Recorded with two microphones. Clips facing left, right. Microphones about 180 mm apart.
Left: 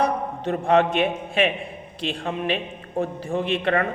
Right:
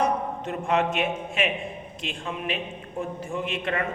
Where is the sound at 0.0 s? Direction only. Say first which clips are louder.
Left 2 dB; 35° left (ahead or behind).